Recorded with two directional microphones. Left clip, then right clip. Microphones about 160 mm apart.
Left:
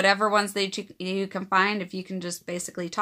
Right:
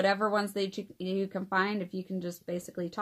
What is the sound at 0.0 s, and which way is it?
Speech, 15° left (ahead or behind).